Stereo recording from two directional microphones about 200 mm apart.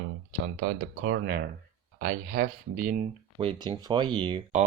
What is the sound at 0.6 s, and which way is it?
Speech, 60° right (ahead or behind).